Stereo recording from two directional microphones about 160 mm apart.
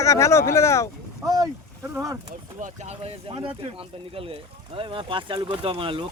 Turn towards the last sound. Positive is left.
turn(degrees=-35)  # may be behind; listen again after turning